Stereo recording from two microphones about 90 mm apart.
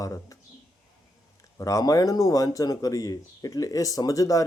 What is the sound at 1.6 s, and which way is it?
Speech, 40° left (ahead or behind).